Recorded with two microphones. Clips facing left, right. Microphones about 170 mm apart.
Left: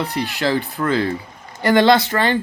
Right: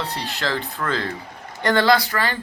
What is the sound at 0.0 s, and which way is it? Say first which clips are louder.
Speech: left 6 dB; 15° left (ahead or behind).